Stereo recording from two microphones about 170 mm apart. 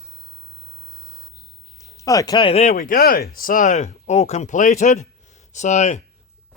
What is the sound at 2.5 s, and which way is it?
Speech, 40° left (ahead or behind).